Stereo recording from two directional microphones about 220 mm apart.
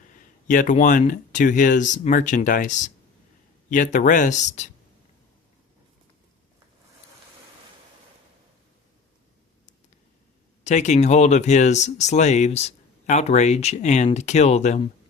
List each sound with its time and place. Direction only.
0.1 s speech: 35° left (ahead or behind)
10.6 s speech: 30° left (ahead or behind)